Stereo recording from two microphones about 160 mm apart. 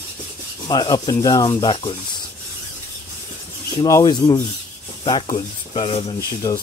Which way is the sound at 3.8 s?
25° left (ahead or behind).